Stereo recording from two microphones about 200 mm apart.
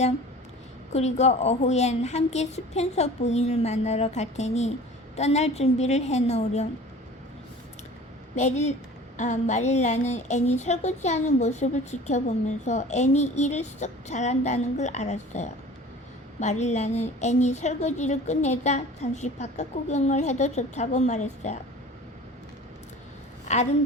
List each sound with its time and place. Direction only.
0.9 s a woman's voice: 35° left (ahead or behind)
8.4 s a woman's voice: 35° left (ahead or behind)
23.5 s a woman's voice: 35° left (ahead or behind)